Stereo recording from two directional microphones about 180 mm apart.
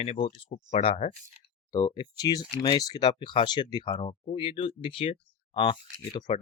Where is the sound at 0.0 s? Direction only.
35° left (ahead or behind).